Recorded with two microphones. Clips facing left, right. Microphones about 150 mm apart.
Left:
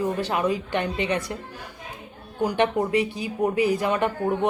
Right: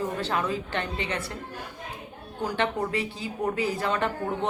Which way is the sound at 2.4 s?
15° left (ahead or behind).